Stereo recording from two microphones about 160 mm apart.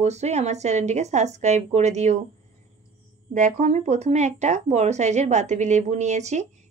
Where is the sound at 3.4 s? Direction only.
50° right (ahead or behind).